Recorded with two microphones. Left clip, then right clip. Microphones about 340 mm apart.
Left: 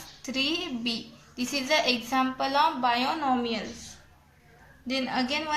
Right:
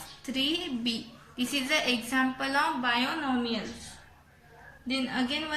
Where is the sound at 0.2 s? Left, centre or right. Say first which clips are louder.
Left 1 dB; centre.